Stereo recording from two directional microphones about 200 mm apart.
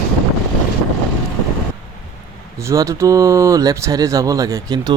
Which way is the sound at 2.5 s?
15° right (ahead or behind).